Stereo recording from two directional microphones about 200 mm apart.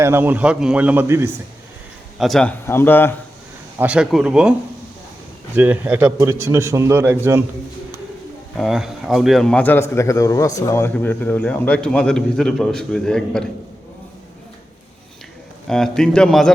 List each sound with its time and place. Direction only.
0.0 s a man's voice: 10° right (ahead or behind)
2.1 s a man's voice: centre (ahead or behind)
3.8 s a man's voice: 5° right (ahead or behind)
5.5 s a man's voice: 10° right (ahead or behind)
8.5 s a man's voice: centre (ahead or behind)
15.6 s a man's voice: centre (ahead or behind)